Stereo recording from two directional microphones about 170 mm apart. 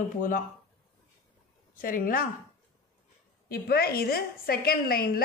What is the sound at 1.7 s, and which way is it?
Speech, 55° left (ahead or behind).